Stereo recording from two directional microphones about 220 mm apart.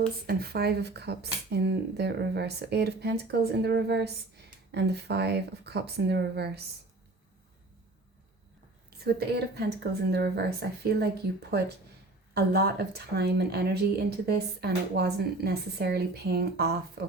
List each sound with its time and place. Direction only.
0.3 s speech: 45° right (ahead or behind)
8.9 s speech: 45° right (ahead or behind)
12.3 s speech: 45° right (ahead or behind)